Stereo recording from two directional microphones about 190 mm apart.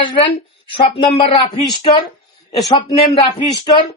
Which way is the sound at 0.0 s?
25° left (ahead or behind).